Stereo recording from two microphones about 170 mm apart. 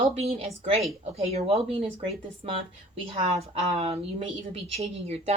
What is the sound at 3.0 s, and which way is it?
A woman's voice, 35° right (ahead or behind).